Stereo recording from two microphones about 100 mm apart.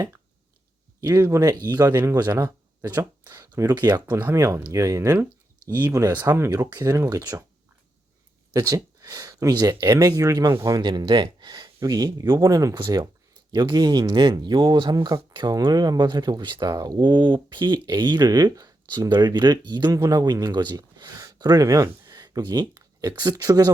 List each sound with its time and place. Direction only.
1.1 s speech: 25° right (ahead or behind)
1.4 s speech: 35° right (ahead or behind)
1.9 s speech: 25° right (ahead or behind)
3.3 s speech: 30° right (ahead or behind)
8.5 s speech: 35° right (ahead or behind)